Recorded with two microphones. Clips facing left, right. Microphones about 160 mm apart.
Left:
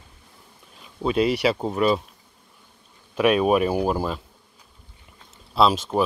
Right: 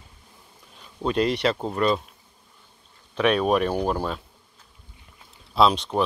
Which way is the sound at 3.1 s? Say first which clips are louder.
Left 2 dB; 5° left (ahead or behind).